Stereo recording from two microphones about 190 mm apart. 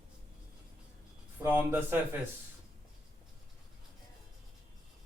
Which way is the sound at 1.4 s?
10° right (ahead or behind).